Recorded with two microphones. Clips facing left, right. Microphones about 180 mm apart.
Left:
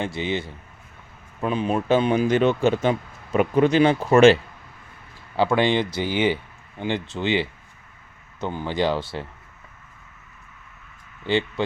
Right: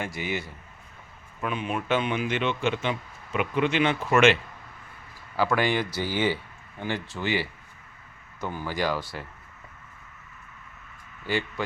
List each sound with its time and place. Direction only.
0.0 s speech: 25° left (ahead or behind)
5.4 s speech: 25° left (ahead or behind)
11.3 s speech: 25° left (ahead or behind)